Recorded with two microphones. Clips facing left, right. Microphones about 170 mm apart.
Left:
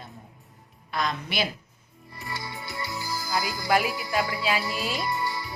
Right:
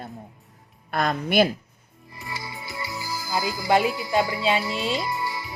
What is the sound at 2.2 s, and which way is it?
Music, centre (ahead or behind).